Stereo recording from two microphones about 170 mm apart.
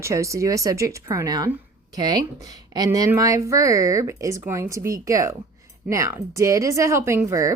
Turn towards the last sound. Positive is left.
turn(degrees=-15)  # may be behind; listen again after turning